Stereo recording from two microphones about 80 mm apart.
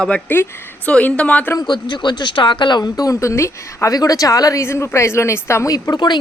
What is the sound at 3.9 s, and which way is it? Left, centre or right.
A woman's voice, left.